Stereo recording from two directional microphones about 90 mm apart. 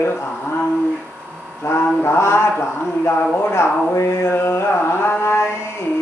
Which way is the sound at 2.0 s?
30° left (ahead or behind).